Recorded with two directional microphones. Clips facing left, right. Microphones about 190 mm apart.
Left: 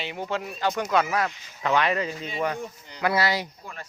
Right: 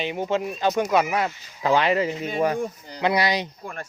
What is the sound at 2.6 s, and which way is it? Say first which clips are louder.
Speech: right 7 dB; 35° right (ahead or behind).